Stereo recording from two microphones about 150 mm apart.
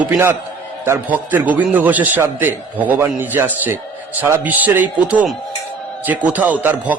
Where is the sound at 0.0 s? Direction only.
10° right (ahead or behind).